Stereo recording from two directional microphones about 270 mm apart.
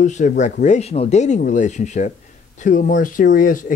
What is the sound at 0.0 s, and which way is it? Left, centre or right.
Speech, left.